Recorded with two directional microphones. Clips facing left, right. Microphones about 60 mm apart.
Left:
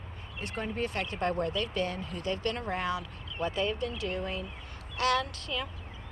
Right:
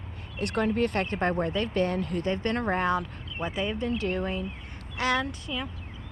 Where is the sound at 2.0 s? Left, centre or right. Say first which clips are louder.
Right 9 dB; right.